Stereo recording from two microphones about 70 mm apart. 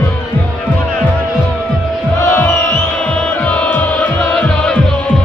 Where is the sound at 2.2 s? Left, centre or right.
Left.